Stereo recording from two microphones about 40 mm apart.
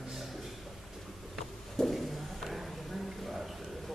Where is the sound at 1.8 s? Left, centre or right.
Centre.